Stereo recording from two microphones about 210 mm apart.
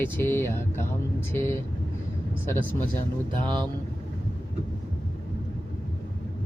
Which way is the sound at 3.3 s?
20° right (ahead or behind).